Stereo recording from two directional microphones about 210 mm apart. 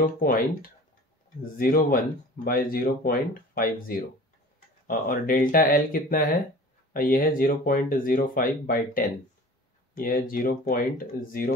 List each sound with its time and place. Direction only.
0.0 s speech: 40° left (ahead or behind)